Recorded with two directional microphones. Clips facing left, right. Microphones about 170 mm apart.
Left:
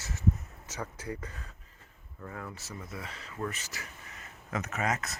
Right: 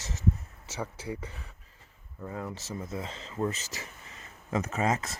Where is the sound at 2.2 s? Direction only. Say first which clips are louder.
Right 5 dB; 15° right (ahead or behind).